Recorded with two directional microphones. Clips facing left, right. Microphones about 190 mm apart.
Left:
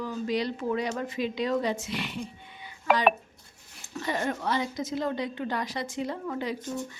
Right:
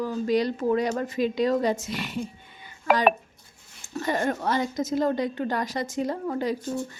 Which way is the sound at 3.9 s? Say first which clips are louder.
Right 4 dB; 45° right (ahead or behind).